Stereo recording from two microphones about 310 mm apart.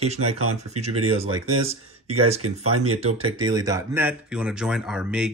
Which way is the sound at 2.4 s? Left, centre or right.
Right.